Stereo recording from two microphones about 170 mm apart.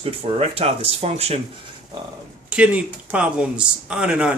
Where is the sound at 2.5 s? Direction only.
5° right (ahead or behind).